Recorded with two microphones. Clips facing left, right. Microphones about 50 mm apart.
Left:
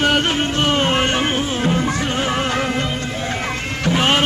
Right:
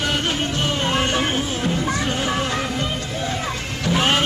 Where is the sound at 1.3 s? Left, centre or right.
Left.